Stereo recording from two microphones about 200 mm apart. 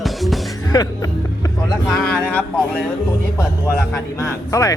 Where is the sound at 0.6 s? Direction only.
20° left (ahead or behind).